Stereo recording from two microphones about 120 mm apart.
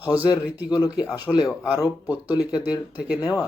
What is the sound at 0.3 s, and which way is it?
Speech, 35° left (ahead or behind).